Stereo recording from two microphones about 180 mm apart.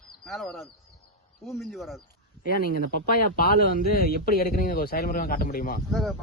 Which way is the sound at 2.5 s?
55° left (ahead or behind).